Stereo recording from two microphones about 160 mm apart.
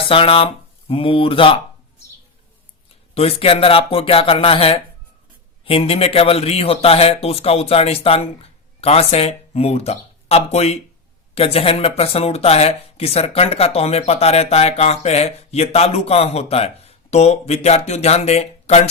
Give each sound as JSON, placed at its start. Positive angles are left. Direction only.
{"t": 0.1, "sound": "speech", "side_deg": 35}
{"t": 3.2, "sound": "speech", "side_deg": 40}